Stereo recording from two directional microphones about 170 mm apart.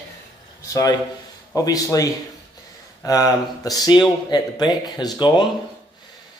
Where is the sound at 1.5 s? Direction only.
20° left (ahead or behind).